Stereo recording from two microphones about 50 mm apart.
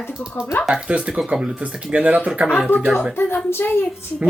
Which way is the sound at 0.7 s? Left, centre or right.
Right.